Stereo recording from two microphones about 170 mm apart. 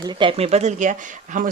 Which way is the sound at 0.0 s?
30° right (ahead or behind).